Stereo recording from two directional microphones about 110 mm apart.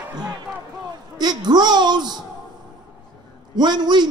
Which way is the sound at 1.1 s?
40° right (ahead or behind).